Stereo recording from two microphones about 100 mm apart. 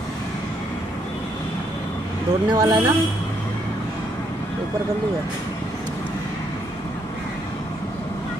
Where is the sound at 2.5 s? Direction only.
40° right (ahead or behind).